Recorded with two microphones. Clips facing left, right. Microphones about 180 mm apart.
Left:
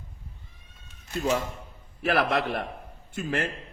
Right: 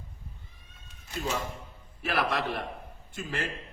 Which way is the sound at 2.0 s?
55° left (ahead or behind).